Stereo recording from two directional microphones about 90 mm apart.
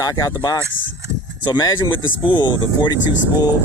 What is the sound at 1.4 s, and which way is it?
Speech, 55° left (ahead or behind).